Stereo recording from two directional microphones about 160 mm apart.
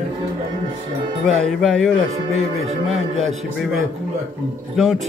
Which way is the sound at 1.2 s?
Centre (ahead or behind).